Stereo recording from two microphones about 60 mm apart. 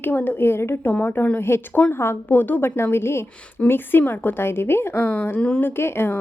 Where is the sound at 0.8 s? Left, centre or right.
Left.